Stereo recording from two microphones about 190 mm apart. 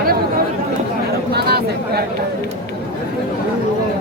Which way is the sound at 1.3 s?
55° right (ahead or behind).